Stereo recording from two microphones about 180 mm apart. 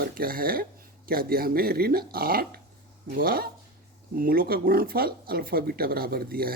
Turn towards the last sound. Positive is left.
turn(degrees=-55)  # may be behind; listen again after turning